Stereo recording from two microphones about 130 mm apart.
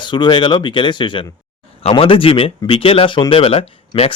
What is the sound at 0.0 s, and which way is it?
Speech, 35° left (ahead or behind).